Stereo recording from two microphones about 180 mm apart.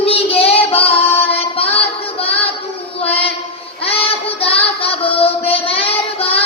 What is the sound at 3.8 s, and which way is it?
Child singing, 30° left (ahead or behind).